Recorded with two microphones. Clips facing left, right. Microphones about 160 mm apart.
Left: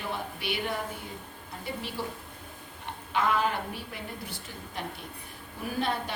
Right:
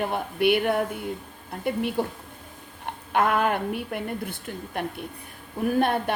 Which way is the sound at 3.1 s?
55° right (ahead or behind).